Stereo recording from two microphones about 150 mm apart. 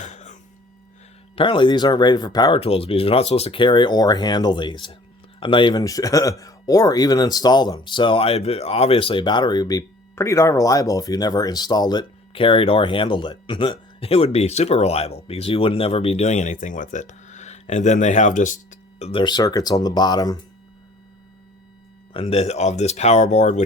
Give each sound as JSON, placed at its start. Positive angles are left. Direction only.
{"t": 0.0, "sound": "cough", "side_deg": 55}
{"t": 1.4, "sound": "speech", "side_deg": 35}
{"t": 2.6, "sound": "speech", "side_deg": 40}
{"t": 19.2, "sound": "speech", "side_deg": 25}
{"t": 22.1, "sound": "speech", "side_deg": 40}